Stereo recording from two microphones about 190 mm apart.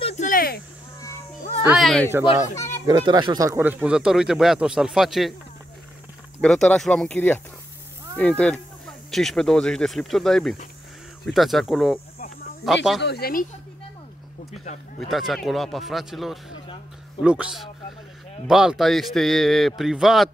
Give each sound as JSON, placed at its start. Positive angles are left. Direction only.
{"t": 0.0, "sound": "a sound", "side_deg": 40}
{"t": 1.6, "sound": "a sound", "side_deg": -5}
{"t": 2.9, "sound": "speech", "side_deg": -20}
{"t": 6.4, "sound": "speech", "side_deg": 5}
{"t": 13.0, "sound": "speech", "side_deg": 55}
{"t": 15.0, "sound": "speech", "side_deg": 0}